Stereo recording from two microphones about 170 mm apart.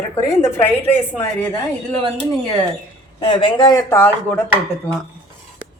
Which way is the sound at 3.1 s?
30° left (ahead or behind).